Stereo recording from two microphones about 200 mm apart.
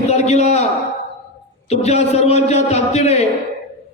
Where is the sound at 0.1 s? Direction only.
35° left (ahead or behind).